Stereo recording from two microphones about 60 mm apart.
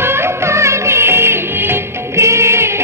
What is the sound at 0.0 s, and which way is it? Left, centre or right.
Music, right.